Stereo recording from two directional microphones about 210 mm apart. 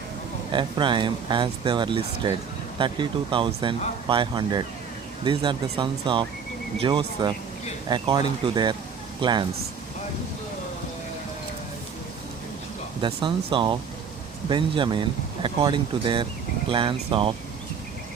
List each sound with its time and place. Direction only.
0.5 s speech: 20° right (ahead or behind)
13.0 s speech: 25° right (ahead or behind)